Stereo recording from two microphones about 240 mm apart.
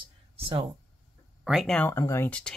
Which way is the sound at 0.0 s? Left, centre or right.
Right.